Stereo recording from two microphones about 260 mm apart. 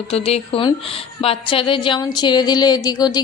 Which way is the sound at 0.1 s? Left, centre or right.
Left.